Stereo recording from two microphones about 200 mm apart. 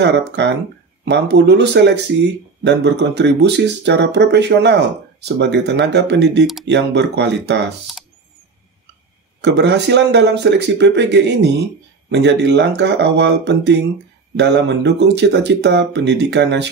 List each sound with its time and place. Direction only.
0.0 s speech: 60° right (ahead or behind)
9.4 s speech: 60° right (ahead or behind)